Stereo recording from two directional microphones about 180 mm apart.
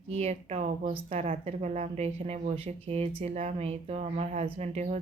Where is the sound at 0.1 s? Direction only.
35° right (ahead or behind).